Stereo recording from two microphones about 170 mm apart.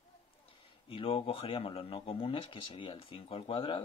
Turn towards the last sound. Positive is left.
turn(degrees=30)  # may be behind; listen again after turning